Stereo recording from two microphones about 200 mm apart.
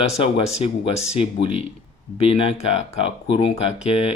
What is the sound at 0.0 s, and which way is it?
Speech, 30° left (ahead or behind).